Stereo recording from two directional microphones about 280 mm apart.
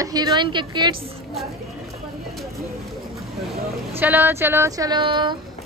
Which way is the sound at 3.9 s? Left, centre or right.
Centre.